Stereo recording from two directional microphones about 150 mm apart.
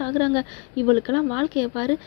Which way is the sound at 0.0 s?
20° left (ahead or behind).